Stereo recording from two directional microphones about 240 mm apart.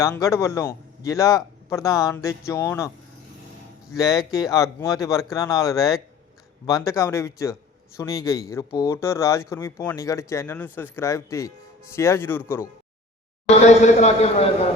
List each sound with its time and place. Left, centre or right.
0.0 s speech: centre
4.2 s speech: centre
13.7 s a man's voice: left